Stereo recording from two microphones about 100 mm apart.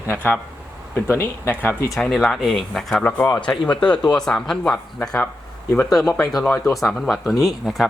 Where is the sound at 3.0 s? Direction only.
25° left (ahead or behind).